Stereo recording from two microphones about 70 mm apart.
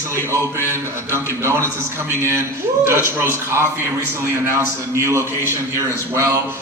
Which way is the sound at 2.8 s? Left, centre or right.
Right.